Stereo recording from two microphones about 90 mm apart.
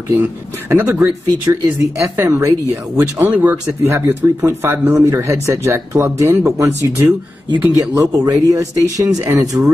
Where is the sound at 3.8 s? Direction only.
30° right (ahead or behind).